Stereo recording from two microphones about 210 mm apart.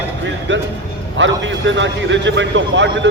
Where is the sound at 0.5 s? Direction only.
60° right (ahead or behind).